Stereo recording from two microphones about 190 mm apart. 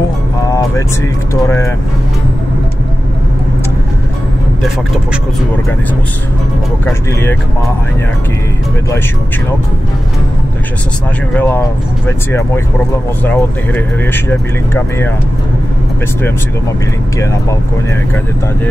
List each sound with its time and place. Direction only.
0.5 s music: 15° left (ahead or behind)
1.3 s speech: 15° left (ahead or behind)
11.3 s speech: 10° left (ahead or behind)
17.2 s speech: 15° left (ahead or behind)